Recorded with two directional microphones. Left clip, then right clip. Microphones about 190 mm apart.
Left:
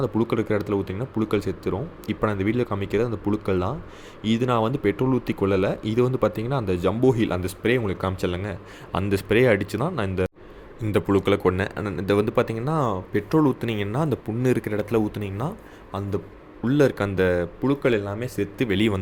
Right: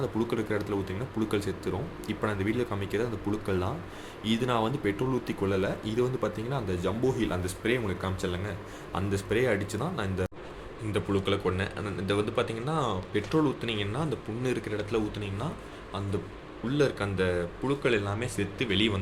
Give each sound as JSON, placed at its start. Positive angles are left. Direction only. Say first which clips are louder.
{"t": 0.0, "sound": "speech", "louder": "left 6 dB", "side_deg": 30}
{"t": 10.9, "sound": "speech", "louder": "left 8 dB", "side_deg": 50}
{"t": 16.6, "sound": "speech", "louder": "left 7 dB", "side_deg": 55}